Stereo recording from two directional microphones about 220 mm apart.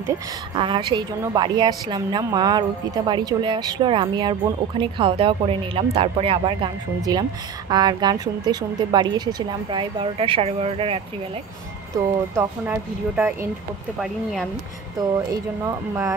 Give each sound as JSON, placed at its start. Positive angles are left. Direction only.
{"t": 0.6, "sound": "a woman's voice", "side_deg": -20}
{"t": 11.9, "sound": "a woman's voice", "side_deg": -15}